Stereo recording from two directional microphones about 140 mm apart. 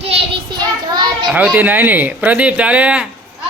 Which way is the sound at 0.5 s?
30° right (ahead or behind).